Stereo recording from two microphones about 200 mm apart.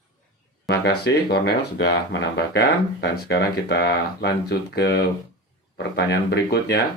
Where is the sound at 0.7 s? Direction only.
55° left (ahead or behind).